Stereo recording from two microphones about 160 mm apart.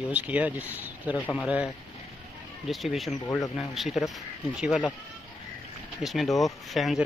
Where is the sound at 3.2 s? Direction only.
15° left (ahead or behind).